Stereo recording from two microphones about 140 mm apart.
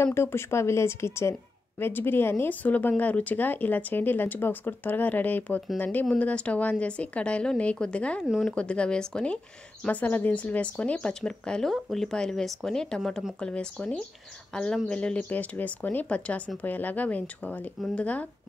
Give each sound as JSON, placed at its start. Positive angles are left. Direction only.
{"t": 0.0, "sound": "speech", "side_deg": 15}